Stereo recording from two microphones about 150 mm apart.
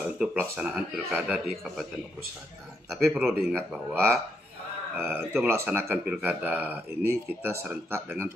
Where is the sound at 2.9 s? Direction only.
Centre (ahead or behind).